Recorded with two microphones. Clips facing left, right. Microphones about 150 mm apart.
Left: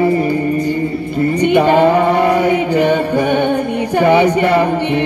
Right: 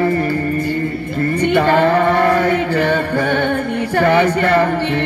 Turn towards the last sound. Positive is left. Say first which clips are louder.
# left 2 dB
turn(degrees=15)  # may be behind; listen again after turning